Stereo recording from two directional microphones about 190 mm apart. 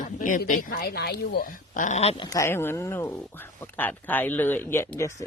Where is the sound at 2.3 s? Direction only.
15° left (ahead or behind).